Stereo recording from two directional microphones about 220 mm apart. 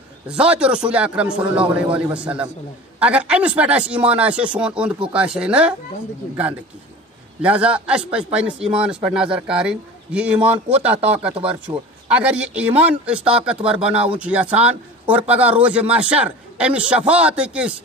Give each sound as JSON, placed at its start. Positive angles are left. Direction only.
{"t": 0.3, "sound": "a man's voice", "side_deg": -5}
{"t": 7.4, "sound": "a man's voice", "side_deg": -5}
{"t": 11.7, "sound": "speech", "side_deg": -20}
{"t": 12.1, "sound": "a man's voice", "side_deg": -5}